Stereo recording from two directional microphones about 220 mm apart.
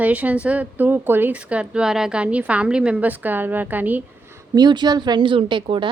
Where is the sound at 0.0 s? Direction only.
5° right (ahead or behind).